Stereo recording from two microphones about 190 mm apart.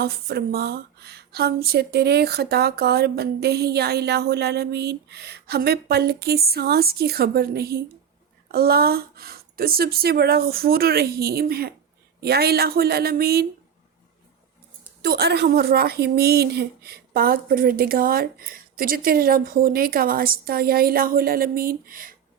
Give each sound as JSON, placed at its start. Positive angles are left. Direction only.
{"t": 0.0, "sound": "a woman's voice", "side_deg": -55}
{"t": 15.0, "sound": "a woman's voice", "side_deg": -55}